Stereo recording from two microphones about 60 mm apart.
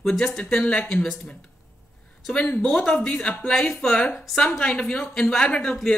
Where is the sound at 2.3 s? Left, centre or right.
Centre.